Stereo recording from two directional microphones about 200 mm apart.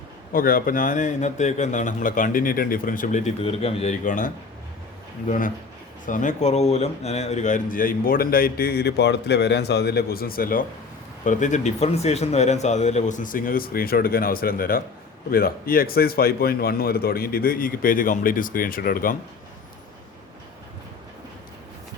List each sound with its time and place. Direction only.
0.3 s speech: 45° left (ahead or behind)
6.1 s speech: 40° left (ahead or behind)